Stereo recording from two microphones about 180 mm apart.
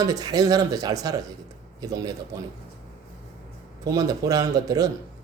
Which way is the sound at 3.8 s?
20° right (ahead or behind).